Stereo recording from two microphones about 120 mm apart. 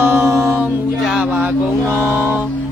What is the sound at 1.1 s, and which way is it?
Speech, 5° right (ahead or behind).